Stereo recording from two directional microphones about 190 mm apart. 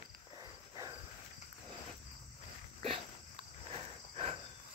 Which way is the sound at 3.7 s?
30° right (ahead or behind).